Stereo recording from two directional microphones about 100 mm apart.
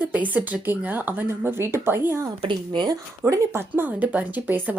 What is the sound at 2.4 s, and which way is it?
Speech, 55° right (ahead or behind).